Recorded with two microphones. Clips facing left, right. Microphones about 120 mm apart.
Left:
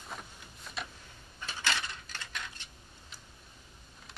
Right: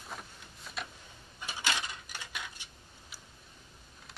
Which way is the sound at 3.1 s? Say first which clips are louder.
Even; 5° right (ahead or behind).